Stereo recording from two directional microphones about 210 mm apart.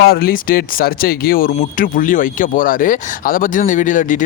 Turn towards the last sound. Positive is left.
turn(degrees=40)  # may be behind; listen again after turning